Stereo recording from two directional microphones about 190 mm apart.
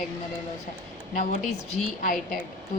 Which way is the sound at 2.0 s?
45° left (ahead or behind).